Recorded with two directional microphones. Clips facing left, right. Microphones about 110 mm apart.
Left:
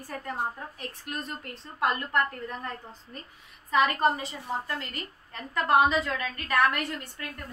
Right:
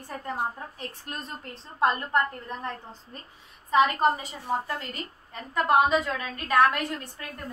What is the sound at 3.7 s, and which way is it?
A woman's voice, 15° right (ahead or behind).